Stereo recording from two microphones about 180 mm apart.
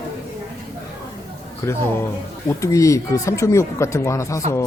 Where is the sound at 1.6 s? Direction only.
15° left (ahead or behind).